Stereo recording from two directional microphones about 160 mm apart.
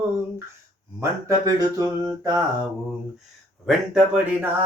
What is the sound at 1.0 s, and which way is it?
Speech, 20° right (ahead or behind).